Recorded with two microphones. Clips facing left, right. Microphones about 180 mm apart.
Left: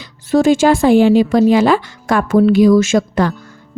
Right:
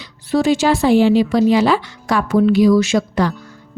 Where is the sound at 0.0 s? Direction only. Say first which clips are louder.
Left 4 dB; 45° left (ahead or behind).